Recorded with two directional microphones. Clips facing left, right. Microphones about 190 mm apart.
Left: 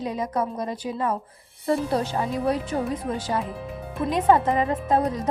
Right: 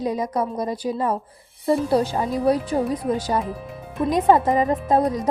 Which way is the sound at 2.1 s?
35° right (ahead or behind).